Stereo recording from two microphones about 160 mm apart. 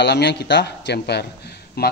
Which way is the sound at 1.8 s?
75° left (ahead or behind).